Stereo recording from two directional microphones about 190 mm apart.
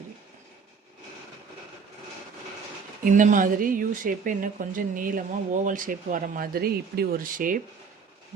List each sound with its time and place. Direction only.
3.0 s speech: 40° right (ahead or behind)